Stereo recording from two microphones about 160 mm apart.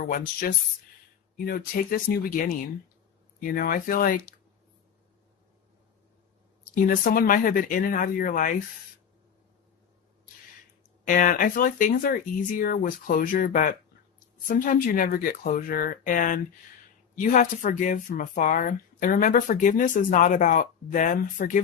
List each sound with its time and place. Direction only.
0.0 s speech: 65° left (ahead or behind)
6.8 s speech: 60° left (ahead or behind)
11.0 s speech: 55° left (ahead or behind)